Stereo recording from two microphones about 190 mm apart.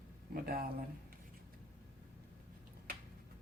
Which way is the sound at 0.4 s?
55° right (ahead or behind).